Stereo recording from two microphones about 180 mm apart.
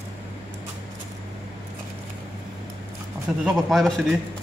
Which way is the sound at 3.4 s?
Centre (ahead or behind).